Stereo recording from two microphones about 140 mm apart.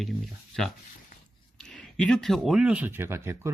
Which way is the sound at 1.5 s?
5° left (ahead or behind).